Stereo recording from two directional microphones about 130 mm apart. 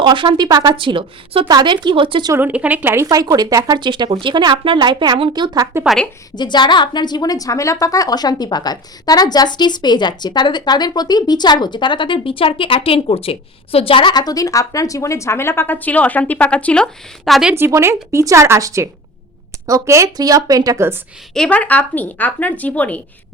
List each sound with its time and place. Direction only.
0.0 s speech: 40° right (ahead or behind)
2.3 s speech: 15° right (ahead or behind); by 5.6 s 35° right (ahead or behind)
5.8 s a woman's voice: centre (ahead or behind)
6.3 s a woman's voice: 35° left (ahead or behind); by 17.5 s centre (ahead or behind)
17.5 s a woman's voice: 20° right (ahead or behind)
21.3 s speech: 10° left (ahead or behind)